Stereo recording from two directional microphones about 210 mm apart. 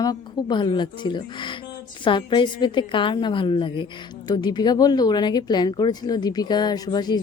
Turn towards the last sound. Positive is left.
turn(degrees=20)  # may be behind; listen again after turning